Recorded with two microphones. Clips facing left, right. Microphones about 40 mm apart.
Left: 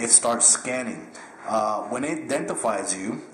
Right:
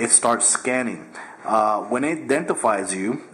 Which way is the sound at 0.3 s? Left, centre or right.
Centre.